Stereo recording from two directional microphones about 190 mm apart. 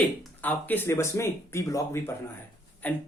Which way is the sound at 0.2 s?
10° left (ahead or behind).